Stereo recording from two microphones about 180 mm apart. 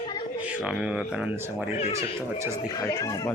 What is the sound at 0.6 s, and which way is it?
Speech, 5° right (ahead or behind).